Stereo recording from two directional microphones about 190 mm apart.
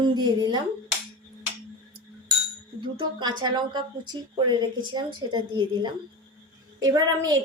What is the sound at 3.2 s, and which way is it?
A woman's voice, 20° right (ahead or behind).